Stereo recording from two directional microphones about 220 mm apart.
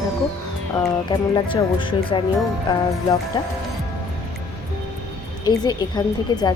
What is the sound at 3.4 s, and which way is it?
Speech, 20° left (ahead or behind).